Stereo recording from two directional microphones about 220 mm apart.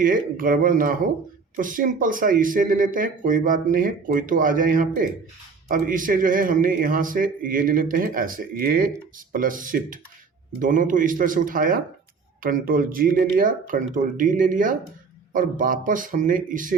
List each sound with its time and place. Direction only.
0.0 s speech: 40° right (ahead or behind)